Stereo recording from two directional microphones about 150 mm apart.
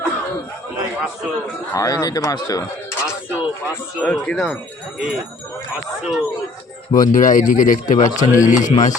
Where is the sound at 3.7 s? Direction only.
5° left (ahead or behind).